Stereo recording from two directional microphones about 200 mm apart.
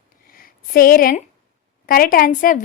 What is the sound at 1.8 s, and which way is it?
Speech, 45° left (ahead or behind).